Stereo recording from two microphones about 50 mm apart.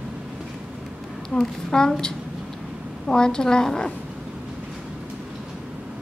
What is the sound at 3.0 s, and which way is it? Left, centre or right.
Speech, centre.